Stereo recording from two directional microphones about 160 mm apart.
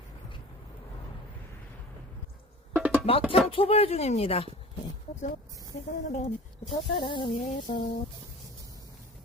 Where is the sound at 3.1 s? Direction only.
35° left (ahead or behind).